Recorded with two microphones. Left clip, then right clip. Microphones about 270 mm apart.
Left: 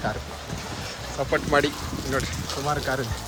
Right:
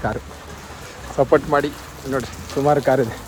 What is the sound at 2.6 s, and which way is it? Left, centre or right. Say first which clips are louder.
Speech: right 11 dB; centre.